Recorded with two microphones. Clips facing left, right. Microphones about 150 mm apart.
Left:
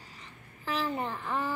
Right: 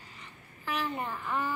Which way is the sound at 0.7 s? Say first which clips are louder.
Left 2 dB; 30° left (ahead or behind).